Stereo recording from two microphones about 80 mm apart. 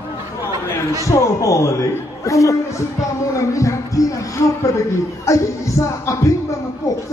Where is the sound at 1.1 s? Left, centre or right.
Left.